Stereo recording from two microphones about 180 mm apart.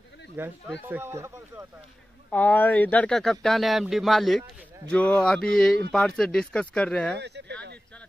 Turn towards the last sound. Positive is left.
turn(degrees=-70)  # may be behind; listen again after turning